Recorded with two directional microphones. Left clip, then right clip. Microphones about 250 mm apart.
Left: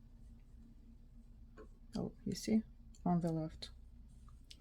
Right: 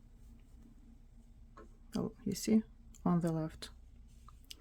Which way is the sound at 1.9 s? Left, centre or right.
Centre.